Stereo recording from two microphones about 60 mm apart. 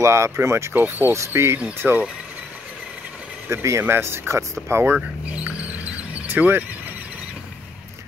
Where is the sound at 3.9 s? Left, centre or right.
Right.